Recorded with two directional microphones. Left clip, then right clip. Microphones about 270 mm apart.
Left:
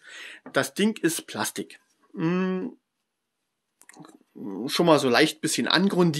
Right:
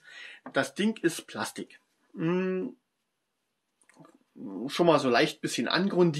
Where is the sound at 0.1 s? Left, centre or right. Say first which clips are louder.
Left 4 dB; left.